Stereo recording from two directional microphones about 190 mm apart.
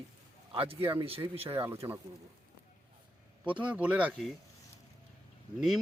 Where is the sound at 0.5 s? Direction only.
30° right (ahead or behind).